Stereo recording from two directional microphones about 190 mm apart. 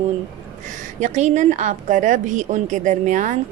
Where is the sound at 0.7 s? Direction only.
40° right (ahead or behind).